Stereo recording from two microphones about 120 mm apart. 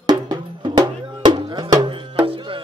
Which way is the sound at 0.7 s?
35° right (ahead or behind).